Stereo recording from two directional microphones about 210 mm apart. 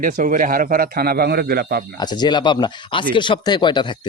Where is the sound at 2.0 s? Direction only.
20° left (ahead or behind).